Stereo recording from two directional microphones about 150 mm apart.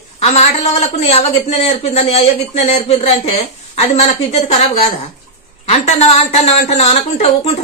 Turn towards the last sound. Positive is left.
turn(degrees=45)  # may be behind; listen again after turning